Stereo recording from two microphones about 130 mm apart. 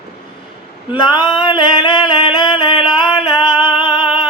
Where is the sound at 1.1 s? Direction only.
40° left (ahead or behind).